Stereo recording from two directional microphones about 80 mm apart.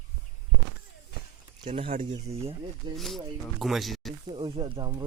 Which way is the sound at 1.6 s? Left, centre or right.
Right.